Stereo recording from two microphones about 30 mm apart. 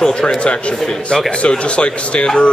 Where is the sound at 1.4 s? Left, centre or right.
Left.